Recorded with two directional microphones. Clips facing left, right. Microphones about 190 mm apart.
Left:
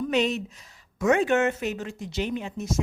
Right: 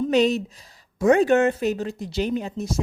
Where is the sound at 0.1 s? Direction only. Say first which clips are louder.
Right 6 dB; 35° right (ahead or behind).